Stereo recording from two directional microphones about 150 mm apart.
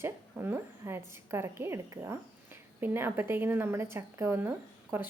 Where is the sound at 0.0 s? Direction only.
15° right (ahead or behind).